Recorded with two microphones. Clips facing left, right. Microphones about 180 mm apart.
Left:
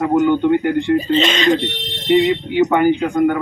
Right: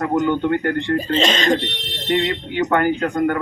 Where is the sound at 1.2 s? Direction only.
40° right (ahead or behind).